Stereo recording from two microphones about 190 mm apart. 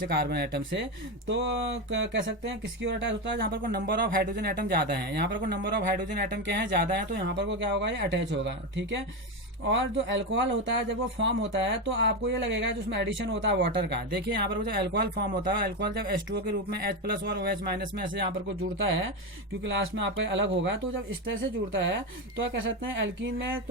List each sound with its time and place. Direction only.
0.1 s speech: 60° right (ahead or behind)
18.8 s speech: 90° right
19.6 s speech: 75° right (ahead or behind)
21.8 s speech: 70° right (ahead or behind)